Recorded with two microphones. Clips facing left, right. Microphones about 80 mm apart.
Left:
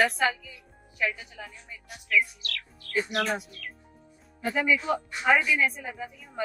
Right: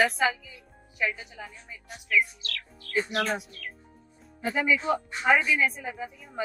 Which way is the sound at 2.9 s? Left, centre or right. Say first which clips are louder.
Even; centre.